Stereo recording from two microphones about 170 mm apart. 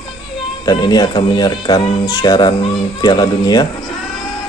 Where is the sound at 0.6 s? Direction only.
25° left (ahead or behind).